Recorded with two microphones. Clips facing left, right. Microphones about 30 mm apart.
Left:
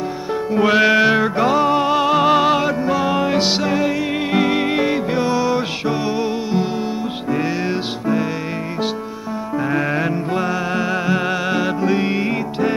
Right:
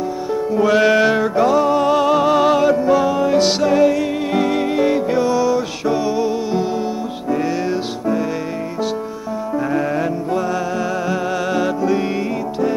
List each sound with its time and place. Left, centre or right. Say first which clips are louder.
0.3 s music: even; left
0.8 s music: even; centre
3.1 s music: right 2 dB; left
3.4 s music: right 4 dB; centre
9.7 s music: left 1 dB; left